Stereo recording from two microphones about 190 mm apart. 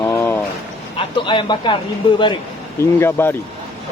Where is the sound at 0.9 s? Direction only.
25° left (ahead or behind).